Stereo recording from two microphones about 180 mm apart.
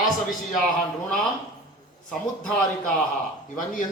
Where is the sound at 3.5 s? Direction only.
45° left (ahead or behind).